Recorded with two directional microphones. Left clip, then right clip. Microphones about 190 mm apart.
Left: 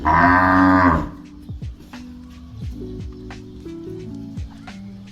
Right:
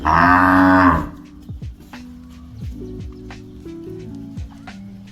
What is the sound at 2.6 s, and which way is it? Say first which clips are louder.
Music: even; centre (ahead or behind).